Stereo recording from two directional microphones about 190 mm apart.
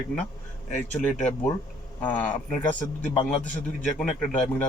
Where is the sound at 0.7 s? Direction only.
40° left (ahead or behind).